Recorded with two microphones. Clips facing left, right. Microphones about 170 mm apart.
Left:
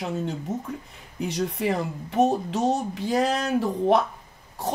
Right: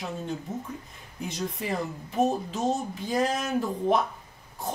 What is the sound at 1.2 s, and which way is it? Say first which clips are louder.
A woman's voice: left 6 dB; 75° left (ahead or behind).